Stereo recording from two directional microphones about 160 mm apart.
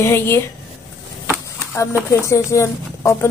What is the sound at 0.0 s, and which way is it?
Speech, 15° left (ahead or behind).